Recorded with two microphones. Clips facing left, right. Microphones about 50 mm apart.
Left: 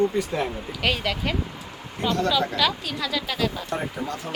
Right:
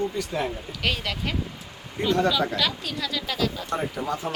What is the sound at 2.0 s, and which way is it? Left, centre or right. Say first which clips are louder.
Speech: right 1 dB; centre.